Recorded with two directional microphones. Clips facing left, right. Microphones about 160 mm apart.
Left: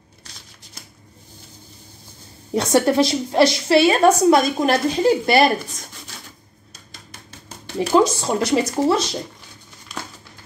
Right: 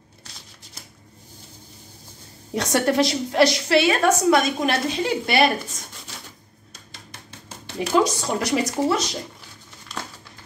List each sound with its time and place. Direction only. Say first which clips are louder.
2.5 s a woman's voice: left 4 dB; 30° left (ahead or behind)
8.0 s speech: left 4 dB; 25° left (ahead or behind)